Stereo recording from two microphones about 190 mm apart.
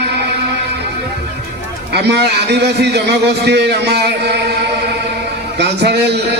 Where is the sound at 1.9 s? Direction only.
60° right (ahead or behind).